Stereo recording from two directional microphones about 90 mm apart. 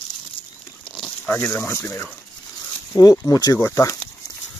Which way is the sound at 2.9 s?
40° left (ahead or behind).